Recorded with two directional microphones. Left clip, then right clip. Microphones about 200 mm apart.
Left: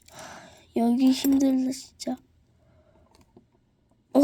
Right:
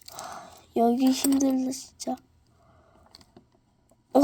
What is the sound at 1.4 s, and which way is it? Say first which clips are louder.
Speech: left 2 dB; 45° left (ahead or behind).